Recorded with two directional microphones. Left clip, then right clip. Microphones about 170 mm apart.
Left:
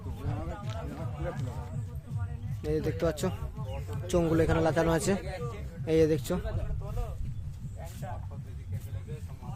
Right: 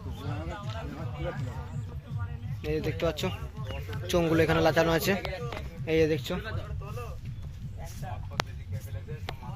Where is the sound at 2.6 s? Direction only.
35° left (ahead or behind).